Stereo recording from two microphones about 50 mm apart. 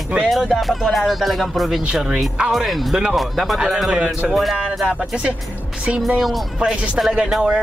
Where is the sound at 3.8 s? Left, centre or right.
Centre.